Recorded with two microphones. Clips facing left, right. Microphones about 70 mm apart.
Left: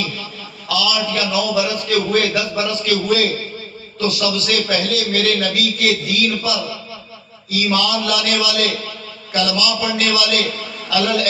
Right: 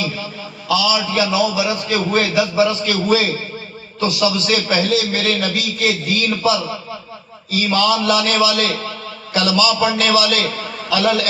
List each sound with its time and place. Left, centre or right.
0.7 s a man's voice: right
7.5 s a man's voice: right